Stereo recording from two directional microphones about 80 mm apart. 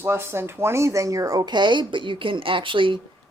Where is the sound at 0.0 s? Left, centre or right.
Right.